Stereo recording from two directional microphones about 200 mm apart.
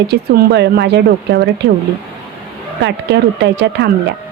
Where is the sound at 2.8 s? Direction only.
60° right (ahead or behind).